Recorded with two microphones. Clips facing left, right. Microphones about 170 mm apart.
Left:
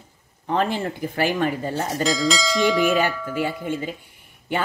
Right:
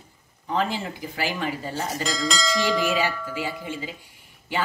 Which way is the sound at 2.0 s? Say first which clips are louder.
Left 6 dB; centre (ahead or behind).